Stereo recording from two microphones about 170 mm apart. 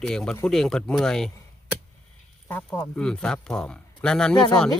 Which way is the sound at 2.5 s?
10° left (ahead or behind).